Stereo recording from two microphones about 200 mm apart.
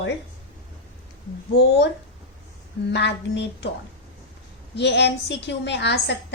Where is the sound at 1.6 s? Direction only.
60° left (ahead or behind).